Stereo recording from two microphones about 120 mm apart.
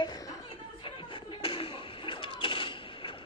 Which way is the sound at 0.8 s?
45° left (ahead or behind).